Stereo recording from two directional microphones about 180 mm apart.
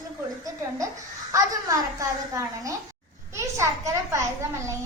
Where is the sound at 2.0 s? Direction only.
20° right (ahead or behind).